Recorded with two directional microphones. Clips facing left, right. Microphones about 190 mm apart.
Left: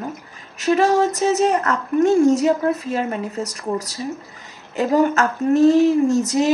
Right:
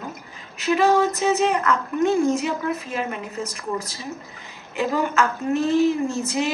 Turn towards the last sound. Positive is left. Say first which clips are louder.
# left 7 dB
turn(degrees=40)  # may be behind; listen again after turning